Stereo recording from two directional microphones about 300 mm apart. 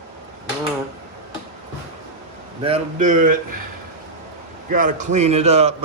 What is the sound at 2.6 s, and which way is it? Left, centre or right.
Speech, right.